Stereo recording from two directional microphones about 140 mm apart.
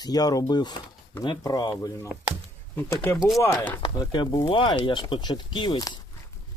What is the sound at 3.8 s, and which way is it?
Speech, 30° left (ahead or behind).